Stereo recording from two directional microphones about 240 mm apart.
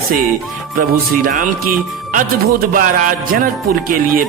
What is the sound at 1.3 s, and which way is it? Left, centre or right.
Speech, right.